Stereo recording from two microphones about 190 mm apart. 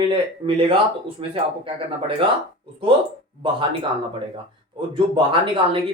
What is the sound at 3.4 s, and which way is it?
Speech, 25° right (ahead or behind).